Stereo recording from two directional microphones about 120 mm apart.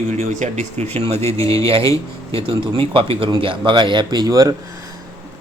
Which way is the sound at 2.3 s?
50° right (ahead or behind).